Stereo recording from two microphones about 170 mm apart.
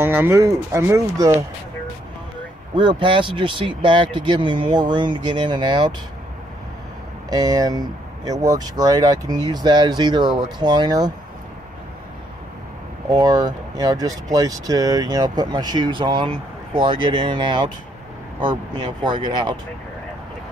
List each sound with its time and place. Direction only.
0.0 s speech: 10° right (ahead or behind)
2.7 s speech: 30° right (ahead or behind)
7.2 s speech: 25° right (ahead or behind)
13.1 s speech: 25° right (ahead or behind)
19.0 s speech: 25° right (ahead or behind)